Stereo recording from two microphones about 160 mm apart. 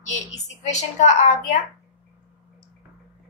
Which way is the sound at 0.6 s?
50° left (ahead or behind).